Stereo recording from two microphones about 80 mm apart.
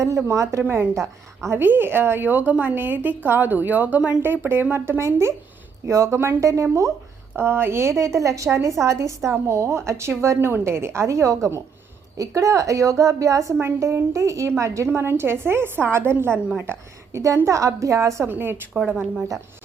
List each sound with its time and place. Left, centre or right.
0.2 s a woman's voice: right
7.3 s a woman's voice: right
18.3 s a woman's voice: right